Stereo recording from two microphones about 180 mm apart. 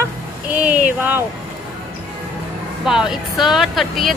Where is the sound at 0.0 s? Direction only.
10° right (ahead or behind).